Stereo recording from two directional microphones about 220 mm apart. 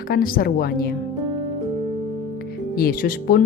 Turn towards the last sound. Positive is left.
turn(degrees=45)  # may be behind; listen again after turning